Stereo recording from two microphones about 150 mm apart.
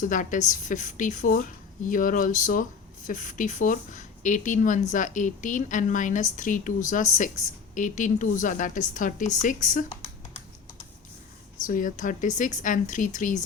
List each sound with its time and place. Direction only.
0.0 s speech: 60° left (ahead or behind)
11.6 s speech: 60° left (ahead or behind)